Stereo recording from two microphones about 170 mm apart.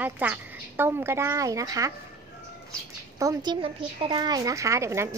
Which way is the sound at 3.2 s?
20° right (ahead or behind).